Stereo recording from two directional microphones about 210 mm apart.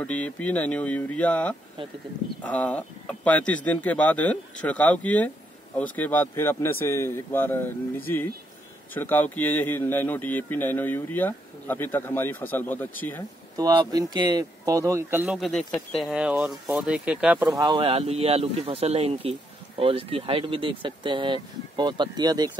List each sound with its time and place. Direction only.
0.0 s speech: 5° left (ahead or behind)
8.9 s speech: 10° left (ahead or behind)
13.6 s speech: 20° right (ahead or behind)
15.2 s speech: centre (ahead or behind)
17.6 s speech: 20° right (ahead or behind)